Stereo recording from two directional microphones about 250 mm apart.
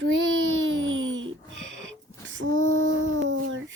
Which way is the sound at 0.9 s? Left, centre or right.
Right.